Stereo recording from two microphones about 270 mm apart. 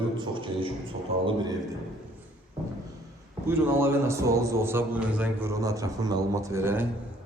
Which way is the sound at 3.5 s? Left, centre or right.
Centre.